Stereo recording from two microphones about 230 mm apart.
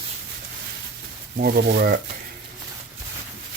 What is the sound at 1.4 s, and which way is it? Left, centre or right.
Speech, right.